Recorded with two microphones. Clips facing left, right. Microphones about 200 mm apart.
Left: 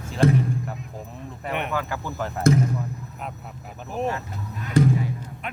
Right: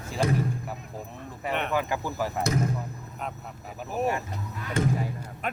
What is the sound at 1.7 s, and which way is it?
Speech, 15° right (ahead or behind).